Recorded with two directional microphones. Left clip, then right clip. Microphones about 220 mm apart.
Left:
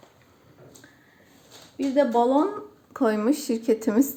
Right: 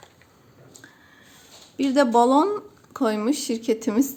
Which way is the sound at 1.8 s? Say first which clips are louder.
Right 3 dB; 25° right (ahead or behind).